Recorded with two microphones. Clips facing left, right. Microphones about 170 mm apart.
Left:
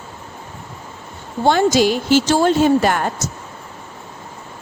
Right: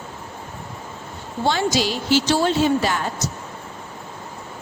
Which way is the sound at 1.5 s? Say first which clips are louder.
Left 7 dB; 50° left (ahead or behind).